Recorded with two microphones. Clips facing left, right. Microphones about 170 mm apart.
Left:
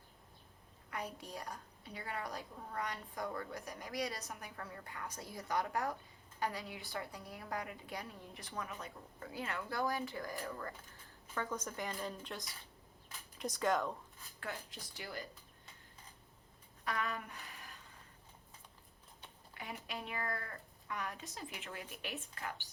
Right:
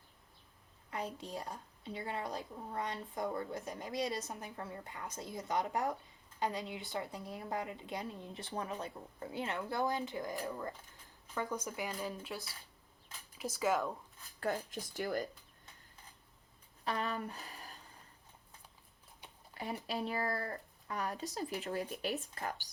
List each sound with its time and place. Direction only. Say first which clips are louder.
0.9 s a woman's voice: right 3 dB; 25° right (ahead or behind); by 12.4 s centre (ahead or behind)
13.4 s speech: right 1 dB; 5° right (ahead or behind)
14.4 s speech: right 9 dB; 45° right (ahead or behind)
16.8 s speech: right 3 dB; 30° right (ahead or behind)
19.5 s speech: right 7 dB; 35° right (ahead or behind)